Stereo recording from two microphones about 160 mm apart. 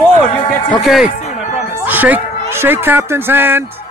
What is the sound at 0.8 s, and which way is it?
Speech, centre (ahead or behind).